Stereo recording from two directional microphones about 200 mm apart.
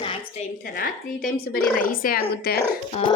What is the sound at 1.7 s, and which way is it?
Speech, 45° left (ahead or behind).